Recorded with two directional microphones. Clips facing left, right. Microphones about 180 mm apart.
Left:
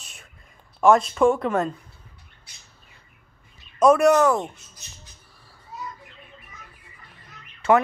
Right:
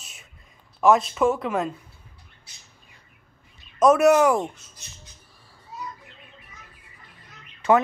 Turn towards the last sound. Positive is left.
turn(degrees=-15)  # may be behind; listen again after turning